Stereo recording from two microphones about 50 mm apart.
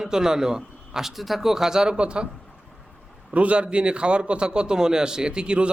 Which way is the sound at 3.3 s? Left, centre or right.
Right.